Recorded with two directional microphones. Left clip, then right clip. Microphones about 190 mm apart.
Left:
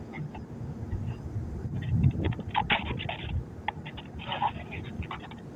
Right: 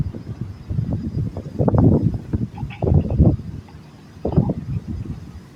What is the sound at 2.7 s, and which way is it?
Dog, 55° left (ahead or behind).